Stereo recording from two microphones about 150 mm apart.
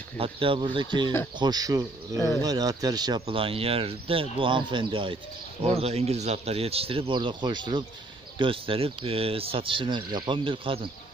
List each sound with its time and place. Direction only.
0.2 s speech: 35° right (ahead or behind)